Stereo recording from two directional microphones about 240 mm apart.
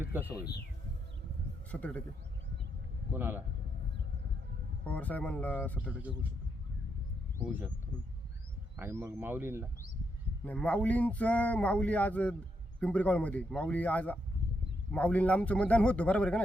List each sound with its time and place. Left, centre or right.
0.0 s speech: centre
1.7 s speech: centre
3.1 s speech: centre
4.9 s speech: centre
7.3 s speech: centre
8.7 s speech: centre
10.4 s speech: centre